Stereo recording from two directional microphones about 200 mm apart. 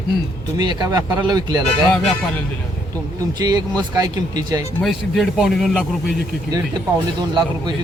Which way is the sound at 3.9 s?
20° right (ahead or behind).